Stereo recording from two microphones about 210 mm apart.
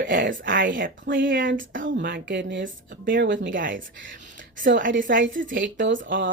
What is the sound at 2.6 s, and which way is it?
Speech, 40° right (ahead or behind).